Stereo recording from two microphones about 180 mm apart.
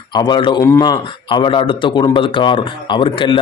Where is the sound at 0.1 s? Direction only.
25° left (ahead or behind).